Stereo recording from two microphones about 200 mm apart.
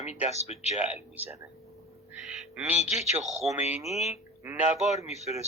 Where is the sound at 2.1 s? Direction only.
5° right (ahead or behind).